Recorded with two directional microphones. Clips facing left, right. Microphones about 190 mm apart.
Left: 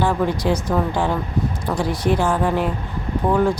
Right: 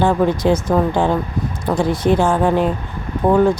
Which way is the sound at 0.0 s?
25° right (ahead or behind).